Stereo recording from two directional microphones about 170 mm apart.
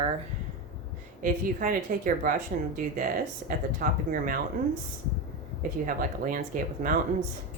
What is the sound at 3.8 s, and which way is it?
Speech, 50° right (ahead or behind).